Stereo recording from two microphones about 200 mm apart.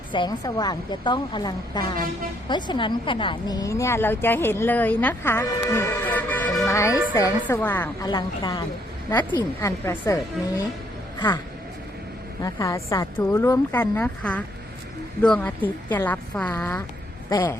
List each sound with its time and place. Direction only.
0.1 s a woman's voice: 20° left (ahead or behind)
12.4 s a woman's voice: 15° left (ahead or behind)